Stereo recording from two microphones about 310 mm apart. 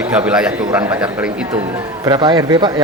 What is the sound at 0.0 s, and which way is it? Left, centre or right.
A man's voice, centre.